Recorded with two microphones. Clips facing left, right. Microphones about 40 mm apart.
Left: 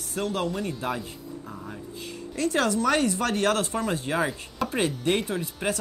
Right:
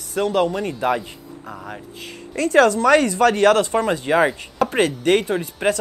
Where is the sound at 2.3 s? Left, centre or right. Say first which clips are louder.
Right 9 dB; right.